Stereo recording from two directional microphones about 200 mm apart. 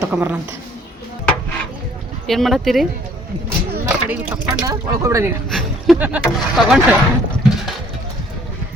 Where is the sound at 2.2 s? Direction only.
Centre (ahead or behind); by 5.3 s 15° right (ahead or behind).